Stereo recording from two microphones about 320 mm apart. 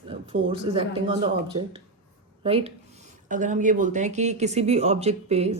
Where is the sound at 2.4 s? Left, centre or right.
Centre.